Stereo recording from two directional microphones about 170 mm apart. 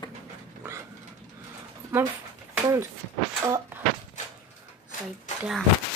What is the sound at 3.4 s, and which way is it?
Speech, 20° right (ahead or behind).